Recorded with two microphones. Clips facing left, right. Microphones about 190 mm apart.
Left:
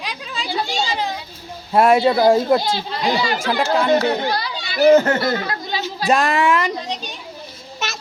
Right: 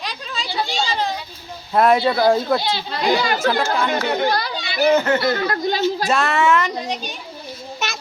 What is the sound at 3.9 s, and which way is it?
Speech, 35° left (ahead or behind).